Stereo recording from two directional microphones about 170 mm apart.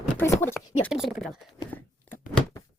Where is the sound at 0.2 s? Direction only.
15° left (ahead or behind).